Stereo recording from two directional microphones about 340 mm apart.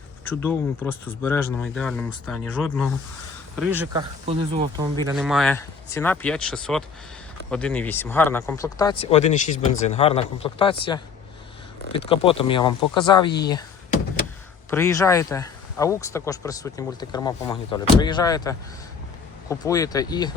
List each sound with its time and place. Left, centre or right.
0.3 s speech: centre
4.3 s speech: centre
5.1 s speech: centre
11.9 s speech: centre